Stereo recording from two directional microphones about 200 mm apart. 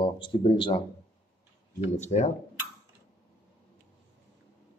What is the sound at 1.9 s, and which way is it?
Speech, 35° left (ahead or behind).